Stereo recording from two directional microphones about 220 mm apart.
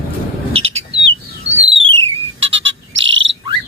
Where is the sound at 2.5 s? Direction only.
60° right (ahead or behind).